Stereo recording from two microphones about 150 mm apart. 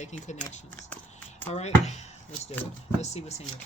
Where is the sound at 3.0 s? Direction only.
45° left (ahead or behind).